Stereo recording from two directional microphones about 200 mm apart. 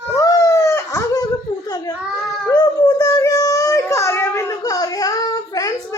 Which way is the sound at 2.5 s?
20° left (ahead or behind).